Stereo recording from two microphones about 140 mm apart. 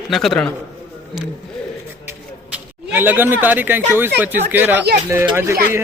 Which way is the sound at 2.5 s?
15° right (ahead or behind).